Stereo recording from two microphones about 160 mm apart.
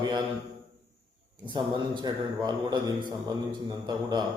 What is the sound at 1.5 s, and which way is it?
A man's voice, 25° right (ahead or behind).